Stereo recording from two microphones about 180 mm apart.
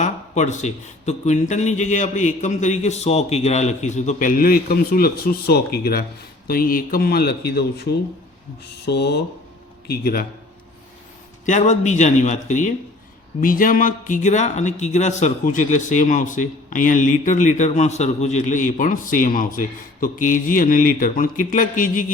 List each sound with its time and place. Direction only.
0.0 s a man's voice: 40° left (ahead or behind); by 7.9 s 65° left (ahead or behind)
8.9 s a man's voice: 70° left (ahead or behind)
11.4 s a man's voice: 40° left (ahead or behind)